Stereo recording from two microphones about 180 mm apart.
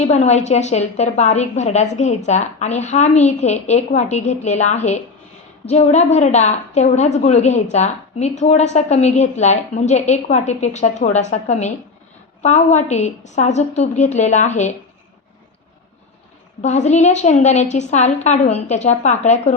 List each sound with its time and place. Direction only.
0.0 s a woman's voice: 40° left (ahead or behind)
16.6 s a woman's voice: 40° left (ahead or behind)